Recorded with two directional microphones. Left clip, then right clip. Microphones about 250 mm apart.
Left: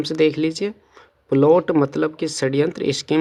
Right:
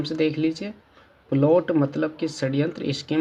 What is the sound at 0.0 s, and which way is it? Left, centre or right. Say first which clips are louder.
Speech: left 5 dB; left.